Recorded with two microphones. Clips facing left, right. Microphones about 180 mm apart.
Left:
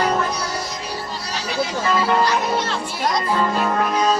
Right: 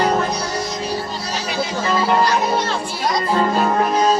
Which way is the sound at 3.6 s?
30° right (ahead or behind).